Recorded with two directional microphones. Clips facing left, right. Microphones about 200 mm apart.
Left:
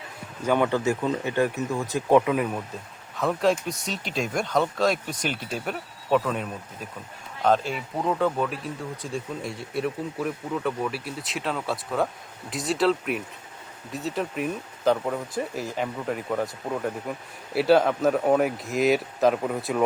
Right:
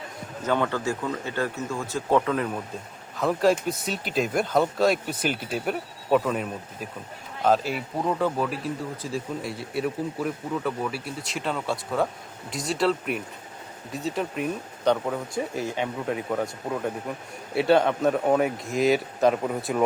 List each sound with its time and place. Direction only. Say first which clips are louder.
0.4 s speech: left 3 dB; 15° left (ahead or behind)
3.2 s speech: right 1 dB; centre (ahead or behind)